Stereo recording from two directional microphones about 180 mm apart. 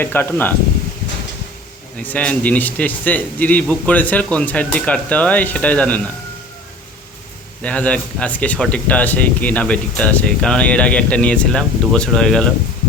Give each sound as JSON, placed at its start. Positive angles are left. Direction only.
{"t": 0.0, "sound": "speech", "side_deg": 10}
{"t": 2.0, "sound": "speech", "side_deg": 10}
{"t": 7.6, "sound": "speech", "side_deg": 5}